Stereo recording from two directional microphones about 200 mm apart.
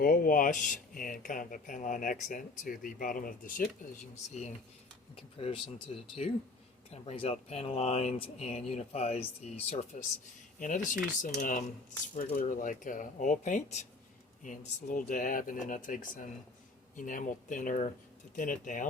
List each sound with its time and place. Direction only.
0.0 s speech: 45° left (ahead or behind)